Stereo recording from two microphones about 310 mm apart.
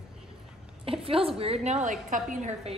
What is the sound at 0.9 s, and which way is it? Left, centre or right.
A woman's voice, centre.